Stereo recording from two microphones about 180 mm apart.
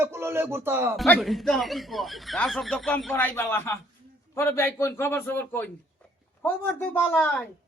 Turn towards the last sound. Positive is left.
turn(degrees=10)  # may be behind; listen again after turning